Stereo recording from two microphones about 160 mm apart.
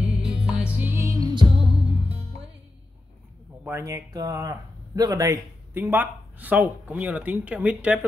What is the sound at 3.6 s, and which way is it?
Speech, 15° right (ahead or behind).